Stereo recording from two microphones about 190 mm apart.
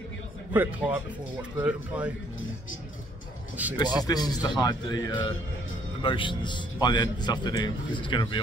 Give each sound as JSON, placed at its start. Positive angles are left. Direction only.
{"t": 0.5, "sound": "a man's voice", "side_deg": -10}
{"t": 3.8, "sound": "a man's voice", "side_deg": 20}